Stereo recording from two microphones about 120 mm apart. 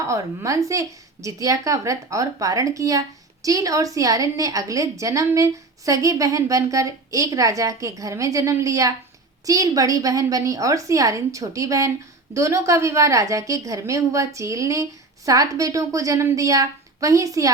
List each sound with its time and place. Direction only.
0.0 s a woman's voice: 25° right (ahead or behind)